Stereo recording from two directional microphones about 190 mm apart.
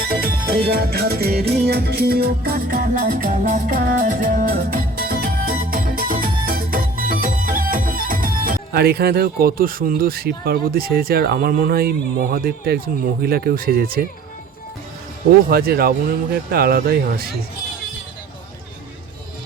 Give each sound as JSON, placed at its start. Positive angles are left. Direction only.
{"t": 0.1, "sound": "music", "side_deg": -50}
{"t": 15.4, "sound": "speech", "side_deg": -55}